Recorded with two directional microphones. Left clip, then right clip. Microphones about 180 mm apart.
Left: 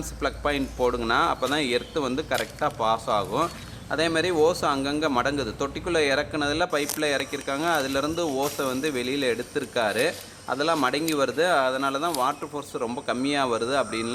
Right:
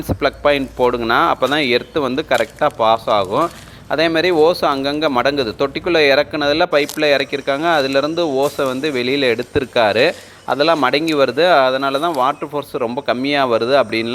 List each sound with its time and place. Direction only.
0.2 s speech: 35° right (ahead or behind)